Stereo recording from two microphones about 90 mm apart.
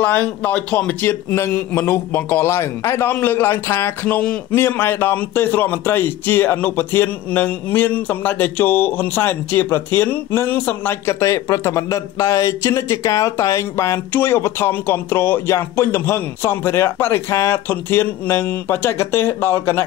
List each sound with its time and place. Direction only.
0.0 s a man's voice: 15° left (ahead or behind)
4.2 s speech: 15° left (ahead or behind)
4.6 s a man's voice: 25° left (ahead or behind)